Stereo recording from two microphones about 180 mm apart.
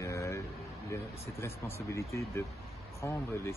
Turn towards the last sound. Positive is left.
turn(degrees=15)  # may be behind; listen again after turning